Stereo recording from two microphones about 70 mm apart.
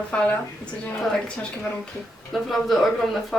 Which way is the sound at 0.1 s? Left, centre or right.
Centre.